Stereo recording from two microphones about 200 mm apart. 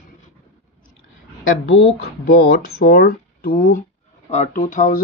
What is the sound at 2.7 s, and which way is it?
Speech, 50° left (ahead or behind).